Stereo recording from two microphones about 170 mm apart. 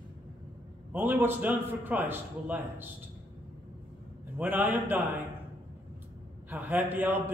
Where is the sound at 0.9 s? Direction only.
10° right (ahead or behind).